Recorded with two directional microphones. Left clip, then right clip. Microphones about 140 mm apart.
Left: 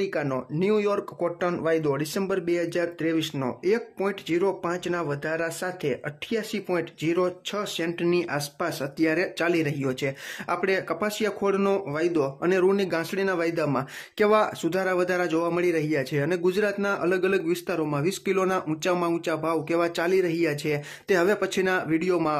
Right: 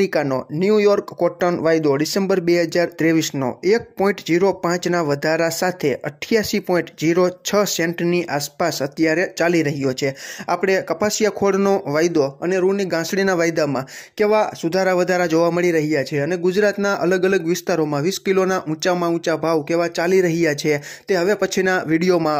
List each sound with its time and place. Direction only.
0.0 s a man's voice: 40° right (ahead or behind)
3.3 s a man's voice: 30° right (ahead or behind); by 7.9 s 45° right (ahead or behind)
8.0 s a man's voice: 30° right (ahead or behind)
12.4 s speech: 15° right (ahead or behind)
13.0 s a man's voice: 40° right (ahead or behind)
13.7 s speech: 20° right (ahead or behind)
14.7 s a man's voice: 35° right (ahead or behind)
21.1 s speech: 20° right (ahead or behind)
21.4 s a man's voice: 35° right (ahead or behind)